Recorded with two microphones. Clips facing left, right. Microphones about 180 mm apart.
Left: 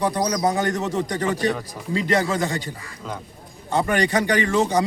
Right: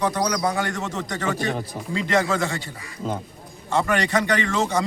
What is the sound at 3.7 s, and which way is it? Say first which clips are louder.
Speech: left 1 dB; 35° left (ahead or behind).